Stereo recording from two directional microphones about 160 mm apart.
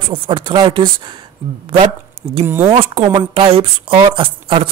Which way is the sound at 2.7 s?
35° right (ahead or behind).